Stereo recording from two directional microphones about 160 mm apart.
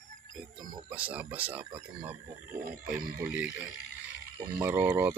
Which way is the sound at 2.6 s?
65° right (ahead or behind).